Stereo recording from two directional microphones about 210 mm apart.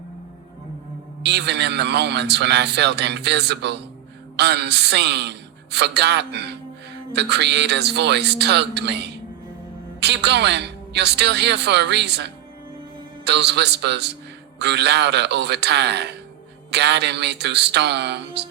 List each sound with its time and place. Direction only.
1.2 s a man's voice: 55° right (ahead or behind)